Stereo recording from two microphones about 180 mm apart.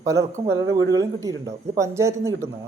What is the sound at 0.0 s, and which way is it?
Speech, 15° right (ahead or behind).